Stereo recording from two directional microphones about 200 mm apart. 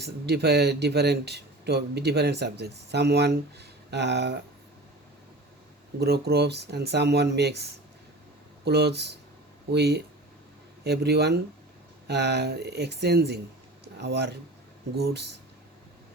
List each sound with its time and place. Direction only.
0.0 s speech: 55° right (ahead or behind)
6.0 s speech: 55° right (ahead or behind)